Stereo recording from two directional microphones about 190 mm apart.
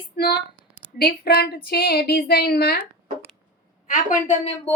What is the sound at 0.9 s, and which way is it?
A woman's voice, 55° left (ahead or behind).